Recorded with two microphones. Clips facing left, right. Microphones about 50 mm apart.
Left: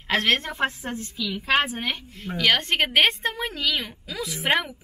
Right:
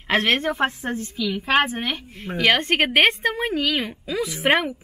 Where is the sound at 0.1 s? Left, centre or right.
Right.